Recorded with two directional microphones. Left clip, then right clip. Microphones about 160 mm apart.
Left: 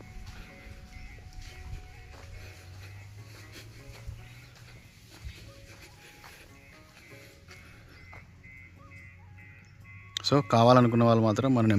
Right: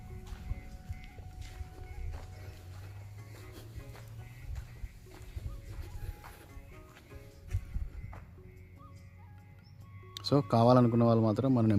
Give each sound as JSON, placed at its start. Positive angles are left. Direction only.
{"t": 10.2, "sound": "speech", "side_deg": 0}